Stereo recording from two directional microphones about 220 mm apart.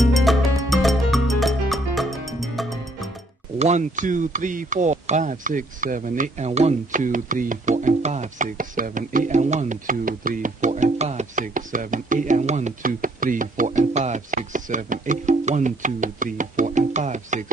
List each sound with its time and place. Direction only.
0.0 s music: centre (ahead or behind)
3.5 s speech: 30° right (ahead or behind)